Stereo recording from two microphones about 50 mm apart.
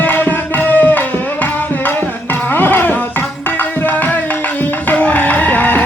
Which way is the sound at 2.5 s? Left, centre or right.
Left.